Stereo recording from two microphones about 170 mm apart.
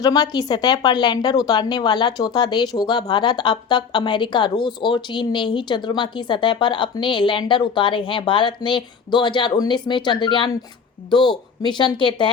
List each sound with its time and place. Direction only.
0.0 s a woman's voice: 25° left (ahead or behind)